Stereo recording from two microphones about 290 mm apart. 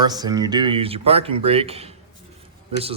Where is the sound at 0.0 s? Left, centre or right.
Centre.